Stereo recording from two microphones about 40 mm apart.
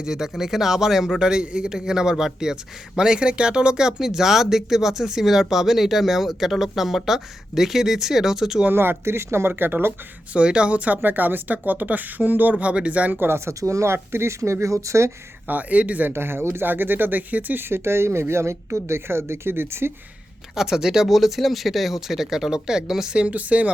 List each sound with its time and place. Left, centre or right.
0.0 s a man's voice: centre
1.3 s a man's voice: right
8.7 s speech: right
9.5 s speech: right
10.3 s speech: right
10.8 s speech: right
13.1 s speech: right
13.8 s speech: right
14.9 s speech: right
15.4 s a man's voice: right
16.0 s speech: right
17.6 s speech: right
20.6 s a man's voice: centre
23.3 s a man's voice: right